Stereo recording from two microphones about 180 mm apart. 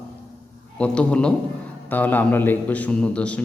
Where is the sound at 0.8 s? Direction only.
5° left (ahead or behind).